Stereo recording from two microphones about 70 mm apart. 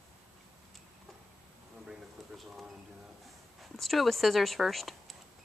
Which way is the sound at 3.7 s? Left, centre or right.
Centre.